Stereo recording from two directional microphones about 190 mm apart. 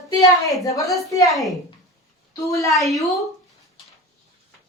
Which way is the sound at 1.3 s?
Centre (ahead or behind).